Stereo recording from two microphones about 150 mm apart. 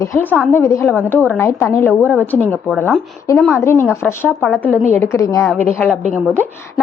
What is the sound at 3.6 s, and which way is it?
Speech, 20° left (ahead or behind).